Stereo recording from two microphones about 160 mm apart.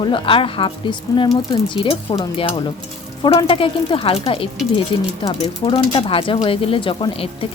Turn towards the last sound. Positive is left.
turn(degrees=35)  # may be behind; listen again after turning